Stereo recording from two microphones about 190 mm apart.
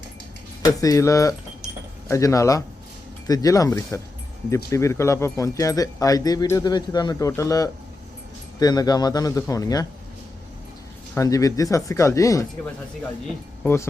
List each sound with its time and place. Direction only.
0.6 s speech: 20° left (ahead or behind)
11.1 s speech: 15° left (ahead or behind)